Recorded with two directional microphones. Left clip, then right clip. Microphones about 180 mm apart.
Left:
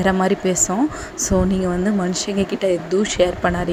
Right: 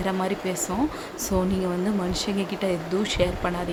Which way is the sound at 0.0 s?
30° left (ahead or behind).